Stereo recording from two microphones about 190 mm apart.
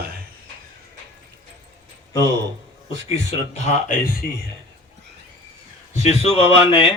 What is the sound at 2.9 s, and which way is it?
Speech, 30° left (ahead or behind).